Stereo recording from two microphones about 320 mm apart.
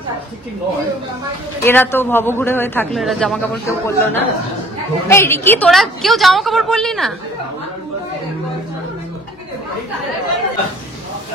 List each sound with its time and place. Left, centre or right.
1.6 s a man's voice: centre